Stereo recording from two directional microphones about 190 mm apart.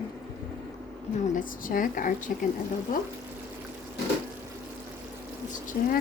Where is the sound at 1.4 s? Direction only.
45° left (ahead or behind).